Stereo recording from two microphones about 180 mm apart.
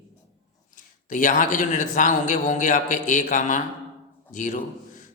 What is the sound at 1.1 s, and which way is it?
A man's voice, 45° left (ahead or behind).